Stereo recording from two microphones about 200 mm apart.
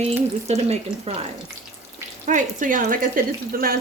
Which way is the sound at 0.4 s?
30° right (ahead or behind).